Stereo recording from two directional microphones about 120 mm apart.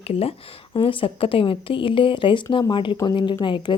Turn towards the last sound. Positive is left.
turn(degrees=40)  # may be behind; listen again after turning